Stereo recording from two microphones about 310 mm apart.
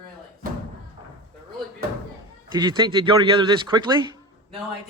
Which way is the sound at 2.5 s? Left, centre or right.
Centre.